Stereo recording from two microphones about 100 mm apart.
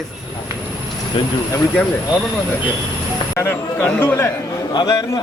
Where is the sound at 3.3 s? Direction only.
25° left (ahead or behind).